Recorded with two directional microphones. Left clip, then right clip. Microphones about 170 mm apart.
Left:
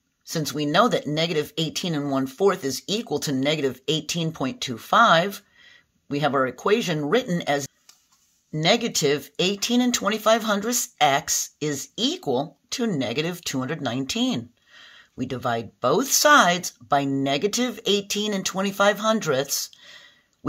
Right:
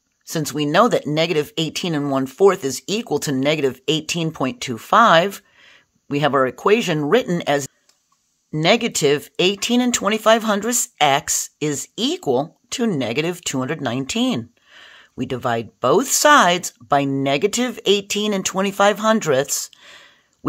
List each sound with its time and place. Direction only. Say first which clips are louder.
0.3 s speech: right 4 dB; 45° right (ahead or behind)